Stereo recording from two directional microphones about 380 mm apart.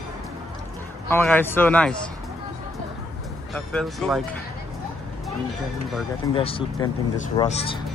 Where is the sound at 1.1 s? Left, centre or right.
Centre.